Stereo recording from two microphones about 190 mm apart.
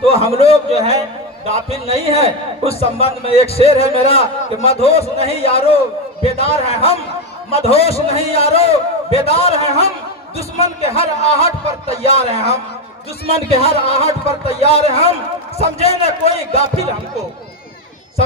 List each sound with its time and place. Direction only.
0.1 s a man's voice: 30° left (ahead or behind)